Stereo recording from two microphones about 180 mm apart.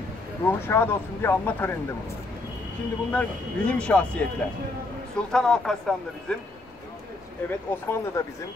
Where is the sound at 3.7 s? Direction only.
5° left (ahead or behind).